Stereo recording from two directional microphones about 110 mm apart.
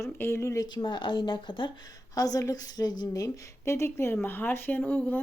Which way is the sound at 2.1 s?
35° left (ahead or behind).